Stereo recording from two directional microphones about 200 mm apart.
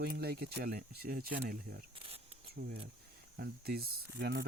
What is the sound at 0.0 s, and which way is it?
Speech, 50° right (ahead or behind).